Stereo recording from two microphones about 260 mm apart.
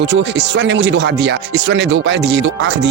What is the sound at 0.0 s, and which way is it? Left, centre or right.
Speech, right.